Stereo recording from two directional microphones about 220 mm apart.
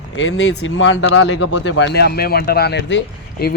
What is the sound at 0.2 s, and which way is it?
Speech, 55° left (ahead or behind).